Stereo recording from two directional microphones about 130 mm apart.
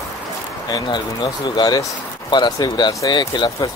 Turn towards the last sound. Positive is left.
turn(degrees=35)  # may be behind; listen again after turning